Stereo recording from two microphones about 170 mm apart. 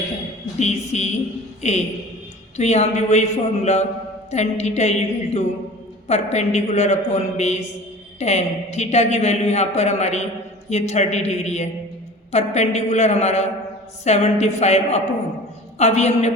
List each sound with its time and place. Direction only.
0.6 s a woman's voice: 40° left (ahead or behind)